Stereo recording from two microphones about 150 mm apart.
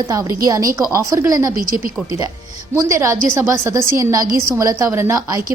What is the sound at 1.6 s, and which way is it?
Speech, 70° right (ahead or behind).